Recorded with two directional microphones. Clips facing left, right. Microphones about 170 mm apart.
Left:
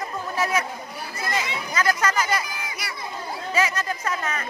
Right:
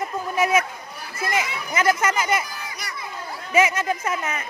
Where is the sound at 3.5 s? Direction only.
20° right (ahead or behind).